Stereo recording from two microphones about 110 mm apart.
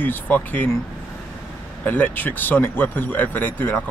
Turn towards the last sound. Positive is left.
turn(degrees=15)  # may be behind; listen again after turning